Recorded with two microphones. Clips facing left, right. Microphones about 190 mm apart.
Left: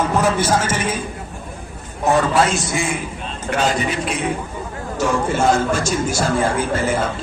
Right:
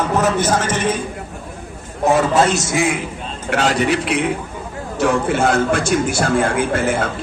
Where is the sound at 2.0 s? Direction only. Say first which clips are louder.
Right 2 dB; 50° right (ahead or behind).